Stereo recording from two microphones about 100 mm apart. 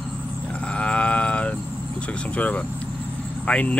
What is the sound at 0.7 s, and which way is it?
Sheep, 10° left (ahead or behind).